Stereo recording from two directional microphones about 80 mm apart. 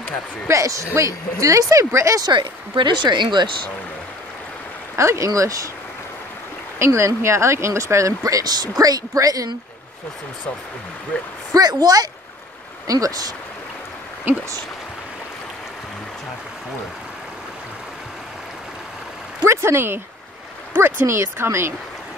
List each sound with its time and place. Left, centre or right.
0.5 s speech: right
2.2 s speech: right
4.9 s speech: right
6.8 s speech: right
11.5 s speech: right
14.3 s speech: right
19.4 s speech: right